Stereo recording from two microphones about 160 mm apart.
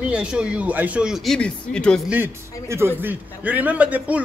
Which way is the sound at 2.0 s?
10° right (ahead or behind).